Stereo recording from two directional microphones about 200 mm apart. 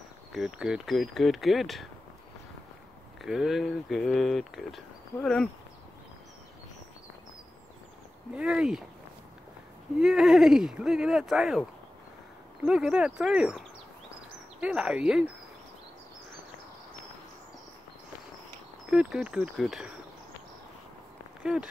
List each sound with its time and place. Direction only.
0.3 s speech: centre (ahead or behind)
3.2 s speech: centre (ahead or behind)
8.4 s speech: 5° right (ahead or behind)
9.9 s speech: 5° right (ahead or behind)
12.6 s speech: 5° right (ahead or behind)
18.9 s speech: 5° right (ahead or behind)
21.4 s speech: 5° right (ahead or behind)